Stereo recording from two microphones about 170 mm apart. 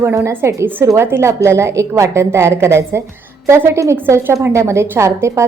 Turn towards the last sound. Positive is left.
turn(degrees=-15)  # may be behind; listen again after turning